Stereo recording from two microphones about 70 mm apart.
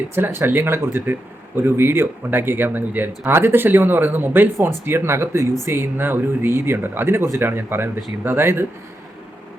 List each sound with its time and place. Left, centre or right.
0.2 s speech: right